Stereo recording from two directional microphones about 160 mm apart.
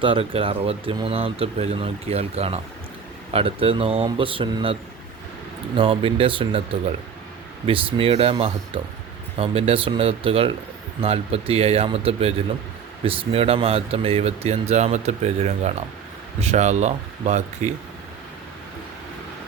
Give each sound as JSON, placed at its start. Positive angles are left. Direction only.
{"t": 0.0, "sound": "speech", "side_deg": -35}
{"t": 7.7, "sound": "speech", "side_deg": -35}